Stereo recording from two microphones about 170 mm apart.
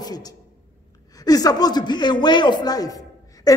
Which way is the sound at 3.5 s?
20° left (ahead or behind).